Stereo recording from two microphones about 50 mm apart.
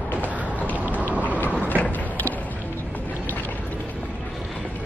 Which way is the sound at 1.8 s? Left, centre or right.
Left.